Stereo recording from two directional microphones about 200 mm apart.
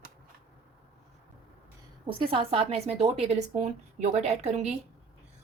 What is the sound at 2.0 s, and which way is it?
A woman's voice, 25° right (ahead or behind).